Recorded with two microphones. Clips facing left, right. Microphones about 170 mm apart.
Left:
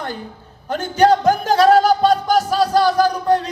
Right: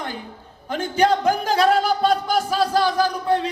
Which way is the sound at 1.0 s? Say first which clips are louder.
Left 5 dB; 40° left (ahead or behind).